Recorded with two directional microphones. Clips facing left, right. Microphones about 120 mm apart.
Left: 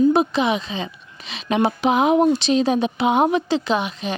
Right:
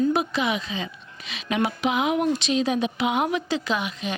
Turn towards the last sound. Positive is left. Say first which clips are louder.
# left 5 dB
turn(degrees=30)  # may be behind; listen again after turning